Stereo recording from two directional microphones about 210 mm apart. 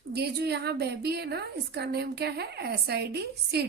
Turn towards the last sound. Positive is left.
turn(degrees=-50)  # may be behind; listen again after turning